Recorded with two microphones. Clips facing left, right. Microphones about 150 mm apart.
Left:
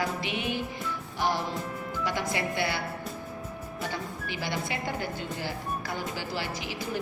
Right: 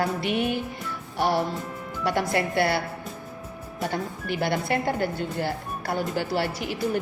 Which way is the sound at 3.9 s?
55° right (ahead or behind).